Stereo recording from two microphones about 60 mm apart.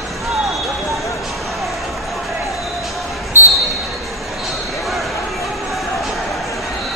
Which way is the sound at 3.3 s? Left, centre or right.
Right.